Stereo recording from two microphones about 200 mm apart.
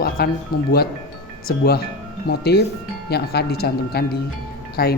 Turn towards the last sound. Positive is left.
turn(degrees=50)  # may be behind; listen again after turning